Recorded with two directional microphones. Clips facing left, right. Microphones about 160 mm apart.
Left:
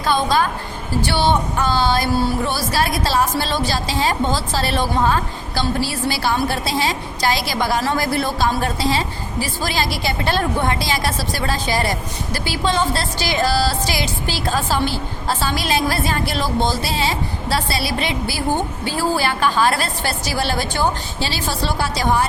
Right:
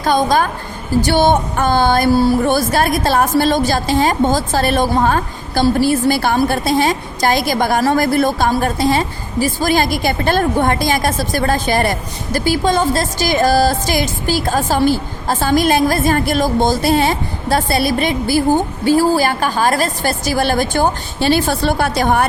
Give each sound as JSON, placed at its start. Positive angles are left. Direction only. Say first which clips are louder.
{"t": 0.0, "sound": "a woman's voice", "louder": "right 4 dB", "side_deg": -45}